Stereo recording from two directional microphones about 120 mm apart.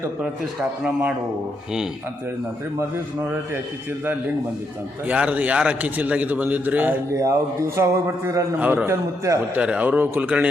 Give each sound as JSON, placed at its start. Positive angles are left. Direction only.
{"t": 5.0, "sound": "a man's voice", "side_deg": -10}
{"t": 7.1, "sound": "speech", "side_deg": -25}
{"t": 8.5, "sound": "a man's voice", "side_deg": -15}
{"t": 9.6, "sound": "a man's voice", "side_deg": -10}